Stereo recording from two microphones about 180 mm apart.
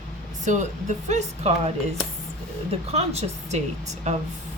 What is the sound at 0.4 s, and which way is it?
Speech, 40° right (ahead or behind).